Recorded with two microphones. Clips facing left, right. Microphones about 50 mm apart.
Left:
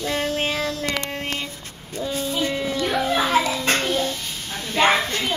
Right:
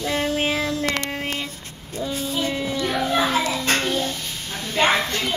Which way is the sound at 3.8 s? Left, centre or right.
Centre.